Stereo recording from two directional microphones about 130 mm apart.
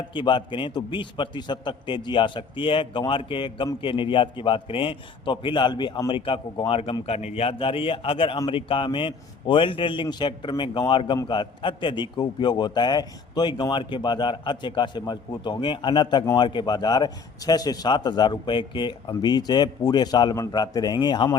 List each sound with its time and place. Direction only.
0.1 s a man's voice: 40° left (ahead or behind)